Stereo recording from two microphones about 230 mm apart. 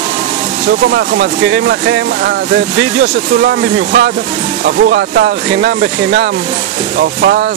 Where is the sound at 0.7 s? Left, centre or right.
Right.